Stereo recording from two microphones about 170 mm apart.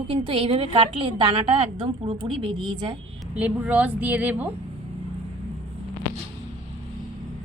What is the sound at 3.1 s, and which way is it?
Speech, 5° right (ahead or behind).